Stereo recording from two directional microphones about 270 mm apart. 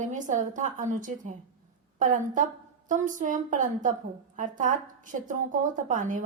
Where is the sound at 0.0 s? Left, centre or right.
Right.